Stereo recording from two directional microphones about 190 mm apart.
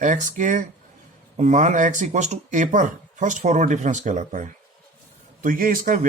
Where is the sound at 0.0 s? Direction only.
40° right (ahead or behind).